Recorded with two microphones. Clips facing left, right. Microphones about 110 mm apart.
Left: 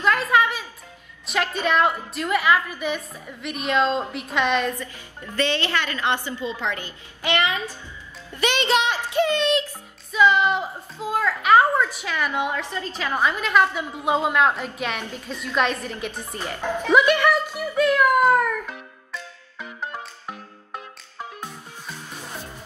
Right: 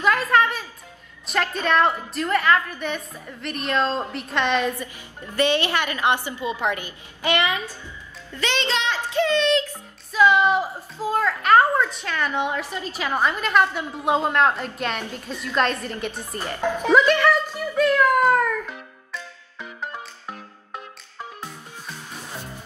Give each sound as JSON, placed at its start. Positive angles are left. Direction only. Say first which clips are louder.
{"t": 0.0, "sound": "music", "louder": "even", "side_deg": -5}
{"t": 1.2, "sound": "a woman's voice", "louder": "even", "side_deg": 0}
{"t": 5.3, "sound": "a woman's voice", "louder": "right 3 dB", "side_deg": -15}
{"t": 8.4, "sound": "a child's voice", "louder": "left 4 dB", "side_deg": 15}
{"t": 10.1, "sound": "a woman's voice", "louder": "right 1 dB", "side_deg": 0}
{"t": 12.5, "sound": "a woman's voice", "louder": "even", "side_deg": -15}
{"t": 16.9, "sound": "a child's voice", "louder": "even", "side_deg": 10}
{"t": 19.8, "sound": "music", "louder": "left 1 dB", "side_deg": 5}